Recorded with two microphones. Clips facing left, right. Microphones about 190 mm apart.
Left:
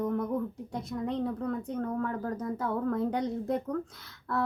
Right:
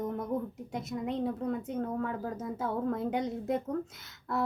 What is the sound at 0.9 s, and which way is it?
Speech, 5° right (ahead or behind).